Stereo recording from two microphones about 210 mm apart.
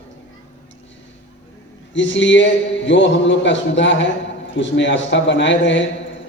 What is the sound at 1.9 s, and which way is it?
A man's voice, 60° left (ahead or behind).